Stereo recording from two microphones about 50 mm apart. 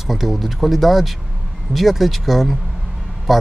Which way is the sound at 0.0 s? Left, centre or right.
Centre.